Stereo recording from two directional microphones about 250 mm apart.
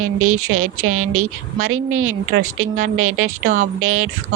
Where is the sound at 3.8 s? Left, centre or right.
Right.